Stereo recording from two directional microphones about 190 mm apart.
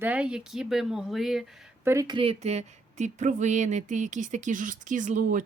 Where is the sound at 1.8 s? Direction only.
15° right (ahead or behind).